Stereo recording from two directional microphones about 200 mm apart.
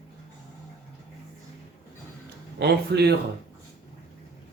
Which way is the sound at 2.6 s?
55° right (ahead or behind).